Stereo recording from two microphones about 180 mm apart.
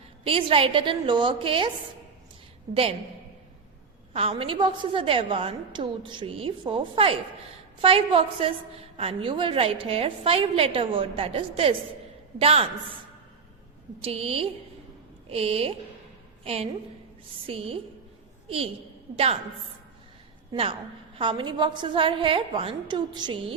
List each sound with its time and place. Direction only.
0.3 s a woman's voice: 30° right (ahead or behind)
4.1 s a woman's voice: 30° right (ahead or behind)
14.0 s a woman's voice: 35° right (ahead or behind)
20.5 s a woman's voice: 30° right (ahead or behind)